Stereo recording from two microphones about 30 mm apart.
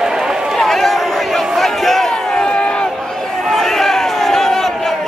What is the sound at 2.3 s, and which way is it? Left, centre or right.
Crowd, left.